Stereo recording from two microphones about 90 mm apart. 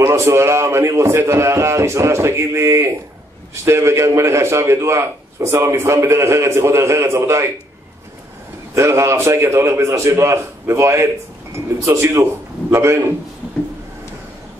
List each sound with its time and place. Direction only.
0.0 s a man's voice: 35° right (ahead or behind)
8.7 s a man's voice: 30° right (ahead or behind)